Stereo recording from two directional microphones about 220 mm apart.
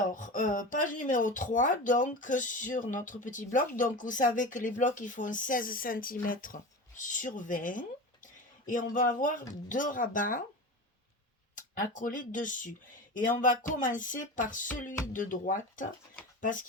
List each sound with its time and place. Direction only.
0.1 s speech: 35° left (ahead or behind)
11.5 s speech: 35° left (ahead or behind)